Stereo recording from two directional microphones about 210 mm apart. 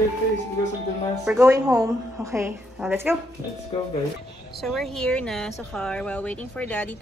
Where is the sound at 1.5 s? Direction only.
15° right (ahead or behind).